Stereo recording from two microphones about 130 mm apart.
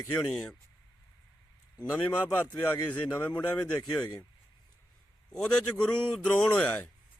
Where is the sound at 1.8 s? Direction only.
15° left (ahead or behind).